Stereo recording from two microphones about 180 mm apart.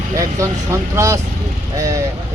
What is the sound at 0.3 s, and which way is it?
Speech, 15° right (ahead or behind).